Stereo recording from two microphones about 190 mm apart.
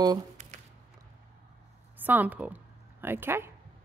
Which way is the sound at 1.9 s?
10° right (ahead or behind).